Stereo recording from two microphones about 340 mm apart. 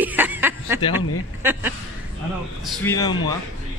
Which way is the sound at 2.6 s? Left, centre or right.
Centre.